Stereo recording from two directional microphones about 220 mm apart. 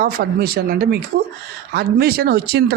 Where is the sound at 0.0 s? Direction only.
45° right (ahead or behind).